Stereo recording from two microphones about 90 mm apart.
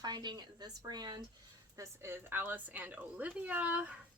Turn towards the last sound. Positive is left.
turn(degrees=-15)  # may be behind; listen again after turning